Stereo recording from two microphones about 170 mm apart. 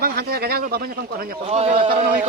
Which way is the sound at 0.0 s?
65° right (ahead or behind).